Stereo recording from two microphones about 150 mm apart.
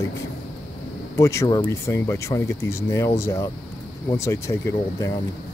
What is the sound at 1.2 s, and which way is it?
Speech, 20° left (ahead or behind).